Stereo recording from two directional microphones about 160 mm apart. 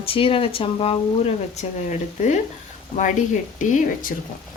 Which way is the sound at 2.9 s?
50° left (ahead or behind).